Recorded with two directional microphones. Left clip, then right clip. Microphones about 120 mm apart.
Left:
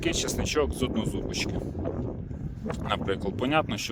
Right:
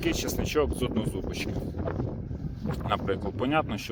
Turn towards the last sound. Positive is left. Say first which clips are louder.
# left 1 dB
turn(degrees=40)  # may be behind; listen again after turning